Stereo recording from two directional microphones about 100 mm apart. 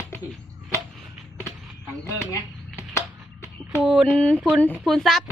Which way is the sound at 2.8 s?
30° left (ahead or behind).